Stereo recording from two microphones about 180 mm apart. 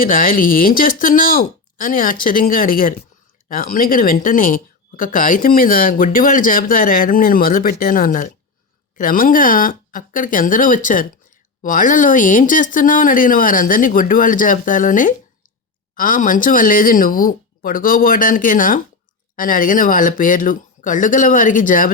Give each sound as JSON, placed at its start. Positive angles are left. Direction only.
{"t": 0.0, "sound": "speech", "side_deg": 50}